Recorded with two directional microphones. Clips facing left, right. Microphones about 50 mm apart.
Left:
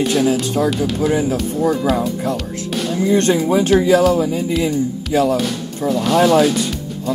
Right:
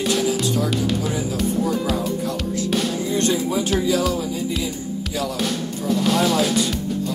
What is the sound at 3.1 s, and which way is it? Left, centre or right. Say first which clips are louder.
Speech: left 9 dB; left.